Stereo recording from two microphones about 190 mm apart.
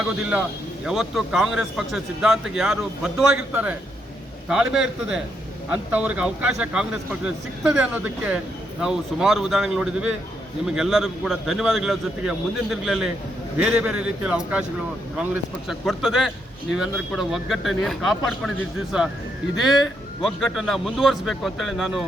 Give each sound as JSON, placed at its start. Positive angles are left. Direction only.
{"t": 0.0, "sound": "a man's voice", "side_deg": -5}